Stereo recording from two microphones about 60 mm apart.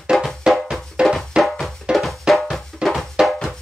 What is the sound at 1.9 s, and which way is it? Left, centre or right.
Music, centre.